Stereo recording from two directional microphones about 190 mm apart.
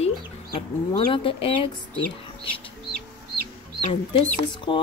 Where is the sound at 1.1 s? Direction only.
30° left (ahead or behind).